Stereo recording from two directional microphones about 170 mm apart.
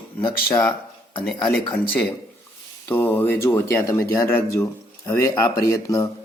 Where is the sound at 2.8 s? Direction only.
10° left (ahead or behind).